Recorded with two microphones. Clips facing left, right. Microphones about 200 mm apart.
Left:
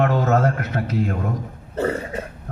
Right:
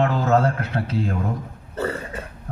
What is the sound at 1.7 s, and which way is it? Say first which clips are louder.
Burping: left 4 dB; 20° left (ahead or behind).